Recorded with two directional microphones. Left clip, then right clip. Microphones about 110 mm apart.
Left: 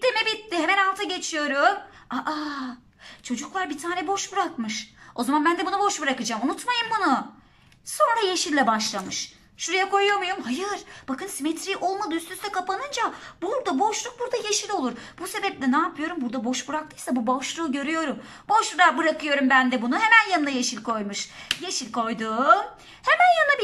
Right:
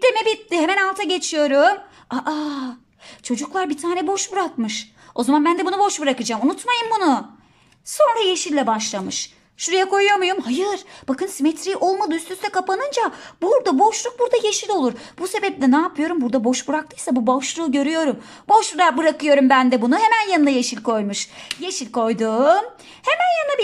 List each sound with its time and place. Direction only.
0.0 s a woman's voice: 35° right (ahead or behind)
3.3 s speech: 45° right (ahead or behind)
8.0 s speech: 25° right (ahead or behind)
14.8 s speech: 45° right (ahead or behind)
23.0 s speech: 15° right (ahead or behind)